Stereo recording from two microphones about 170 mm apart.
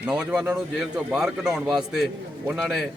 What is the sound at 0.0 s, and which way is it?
A man's voice, 5° right (ahead or behind).